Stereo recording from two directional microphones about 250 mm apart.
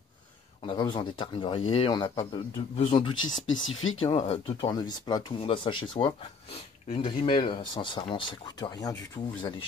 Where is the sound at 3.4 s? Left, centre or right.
Left.